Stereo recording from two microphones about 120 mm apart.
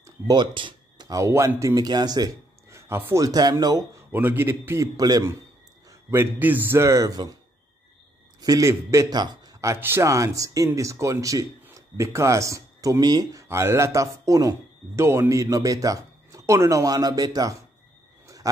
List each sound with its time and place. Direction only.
0.0 s speech: 35° right (ahead or behind)
4.1 s a man's voice: 15° right (ahead or behind)
5.9 s a man's voice: 20° right (ahead or behind)
8.4 s a man's voice: 30° right (ahead or behind)
18.2 s a sound: 30° right (ahead or behind)